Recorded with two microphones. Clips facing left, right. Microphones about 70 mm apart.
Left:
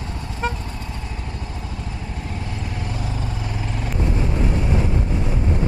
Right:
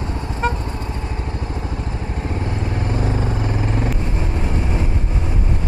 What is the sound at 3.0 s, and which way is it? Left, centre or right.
Vehicle, right.